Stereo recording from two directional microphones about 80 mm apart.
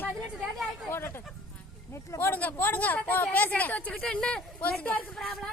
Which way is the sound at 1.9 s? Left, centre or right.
Left.